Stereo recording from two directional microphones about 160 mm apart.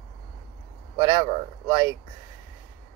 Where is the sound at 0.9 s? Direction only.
25° right (ahead or behind).